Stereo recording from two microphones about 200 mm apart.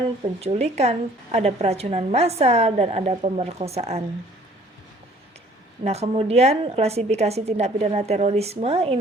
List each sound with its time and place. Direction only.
0.2 s a woman's voice: 30° right (ahead or behind)
5.8 s a woman's voice: 30° right (ahead or behind)